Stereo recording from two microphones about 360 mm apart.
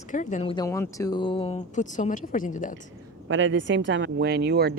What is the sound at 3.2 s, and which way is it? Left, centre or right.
Speech, right.